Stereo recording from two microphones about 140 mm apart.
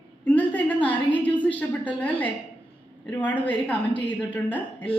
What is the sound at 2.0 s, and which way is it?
A woman's voice, 10° left (ahead or behind).